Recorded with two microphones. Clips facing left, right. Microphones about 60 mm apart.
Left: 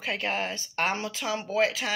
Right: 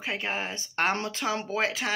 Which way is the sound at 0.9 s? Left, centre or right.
Right.